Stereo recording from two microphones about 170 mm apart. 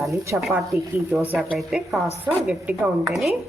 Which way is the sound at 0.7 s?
15° right (ahead or behind).